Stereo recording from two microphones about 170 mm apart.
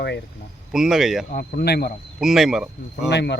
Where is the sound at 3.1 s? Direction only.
80° left.